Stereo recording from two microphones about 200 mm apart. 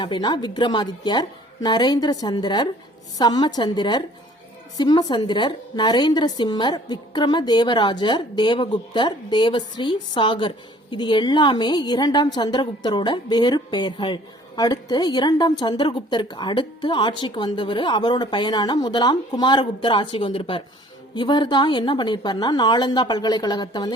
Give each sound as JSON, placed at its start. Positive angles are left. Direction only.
{"t": 0.0, "sound": "a woman's voice", "side_deg": 20}